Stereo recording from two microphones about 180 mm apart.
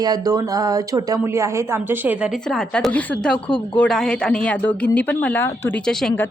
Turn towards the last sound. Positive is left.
turn(degrees=5)  # may be behind; listen again after turning